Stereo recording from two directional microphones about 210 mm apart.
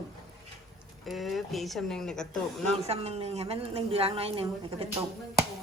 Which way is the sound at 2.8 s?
30° right (ahead or behind).